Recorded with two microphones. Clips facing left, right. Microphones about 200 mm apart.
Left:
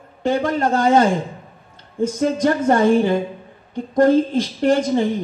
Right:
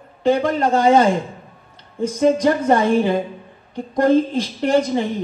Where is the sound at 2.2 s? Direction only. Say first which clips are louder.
Right 3 dB; 50° left (ahead or behind).